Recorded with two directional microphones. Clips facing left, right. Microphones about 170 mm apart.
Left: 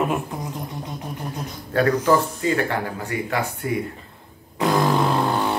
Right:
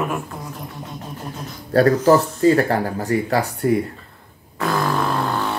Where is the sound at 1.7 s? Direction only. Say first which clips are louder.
Right 4 dB; 40° right (ahead or behind).